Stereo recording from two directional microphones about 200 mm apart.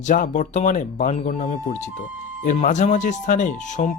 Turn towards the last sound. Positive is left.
turn(degrees=40)  # may be behind; listen again after turning